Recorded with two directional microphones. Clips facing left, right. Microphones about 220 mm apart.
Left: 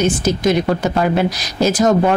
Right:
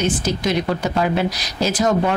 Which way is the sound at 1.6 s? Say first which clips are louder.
Left 5 dB; 45° left (ahead or behind).